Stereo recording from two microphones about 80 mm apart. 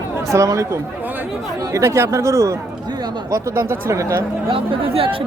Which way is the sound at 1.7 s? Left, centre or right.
Right.